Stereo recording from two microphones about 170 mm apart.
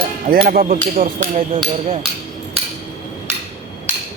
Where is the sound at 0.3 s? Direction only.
60° right (ahead or behind).